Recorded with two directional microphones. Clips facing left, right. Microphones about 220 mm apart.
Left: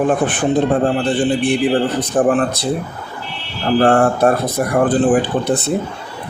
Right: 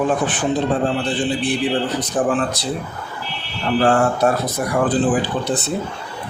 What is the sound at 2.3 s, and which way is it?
Speech, 55° left (ahead or behind).